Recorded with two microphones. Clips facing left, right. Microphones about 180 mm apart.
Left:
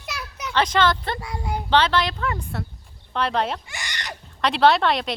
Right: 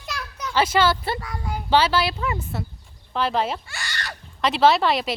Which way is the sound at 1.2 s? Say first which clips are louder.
Left 2 dB; 15° left (ahead or behind).